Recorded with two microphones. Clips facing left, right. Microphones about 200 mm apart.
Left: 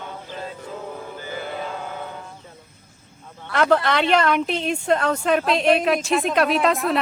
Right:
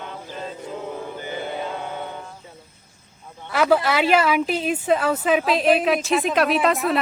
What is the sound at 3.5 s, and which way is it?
A woman's voice, 5° right (ahead or behind).